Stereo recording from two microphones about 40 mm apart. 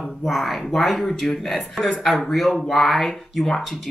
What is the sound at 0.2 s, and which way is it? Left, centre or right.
Speech, centre.